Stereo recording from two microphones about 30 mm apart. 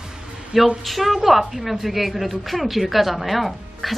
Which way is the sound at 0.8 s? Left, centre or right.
Centre.